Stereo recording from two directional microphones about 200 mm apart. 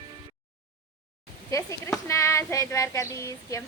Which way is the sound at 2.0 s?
15° left (ahead or behind).